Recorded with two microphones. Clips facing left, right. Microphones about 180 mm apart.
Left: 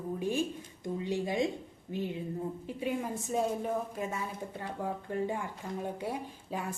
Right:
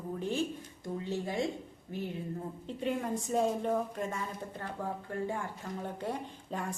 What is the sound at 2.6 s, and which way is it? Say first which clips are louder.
A woman's voice: right 3 dB; 5° left (ahead or behind).